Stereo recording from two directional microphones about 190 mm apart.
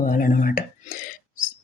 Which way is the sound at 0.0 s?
45° left (ahead or behind).